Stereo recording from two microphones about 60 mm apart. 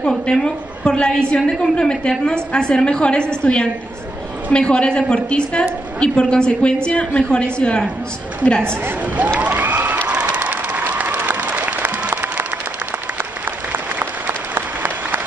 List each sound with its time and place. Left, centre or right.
0.3 s a woman's voice: centre
9.0 s speech: right
9.4 s a sound: right
10.0 s applause: right
13.7 s applause: right